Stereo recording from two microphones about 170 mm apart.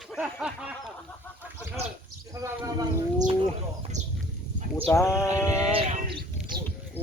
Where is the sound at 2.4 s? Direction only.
20° right (ahead or behind).